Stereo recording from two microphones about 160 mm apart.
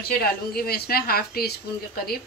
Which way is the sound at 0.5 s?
75° left (ahead or behind).